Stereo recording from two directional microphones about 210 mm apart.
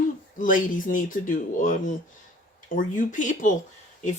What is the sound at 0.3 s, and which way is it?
Speech, 40° left (ahead or behind).